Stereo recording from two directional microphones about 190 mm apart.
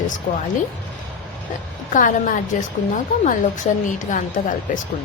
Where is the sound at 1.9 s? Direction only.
45° left (ahead or behind).